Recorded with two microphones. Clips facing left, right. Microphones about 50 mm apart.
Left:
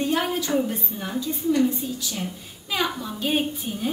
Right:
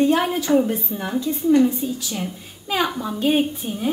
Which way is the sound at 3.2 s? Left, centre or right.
Centre.